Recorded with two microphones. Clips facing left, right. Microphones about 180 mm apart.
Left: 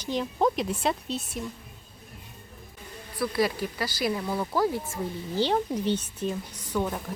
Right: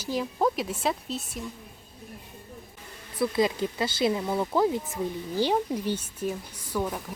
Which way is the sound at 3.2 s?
20° right (ahead or behind).